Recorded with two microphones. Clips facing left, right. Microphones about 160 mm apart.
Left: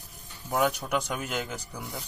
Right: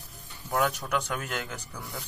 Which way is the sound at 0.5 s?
15° left (ahead or behind).